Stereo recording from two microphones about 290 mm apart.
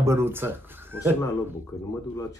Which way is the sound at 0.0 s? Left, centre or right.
Centre.